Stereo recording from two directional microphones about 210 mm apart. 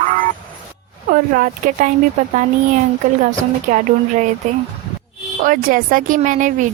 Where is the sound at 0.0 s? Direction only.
40° right (ahead or behind).